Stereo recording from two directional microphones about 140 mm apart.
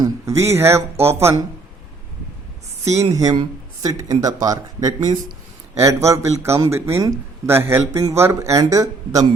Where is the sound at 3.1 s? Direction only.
25° right (ahead or behind).